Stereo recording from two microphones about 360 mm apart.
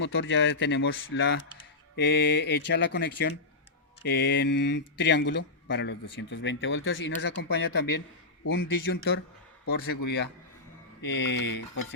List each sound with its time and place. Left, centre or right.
0.0 s speech: left